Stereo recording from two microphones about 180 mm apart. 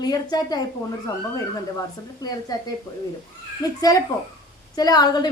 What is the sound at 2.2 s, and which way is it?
Speech, 20° left (ahead or behind).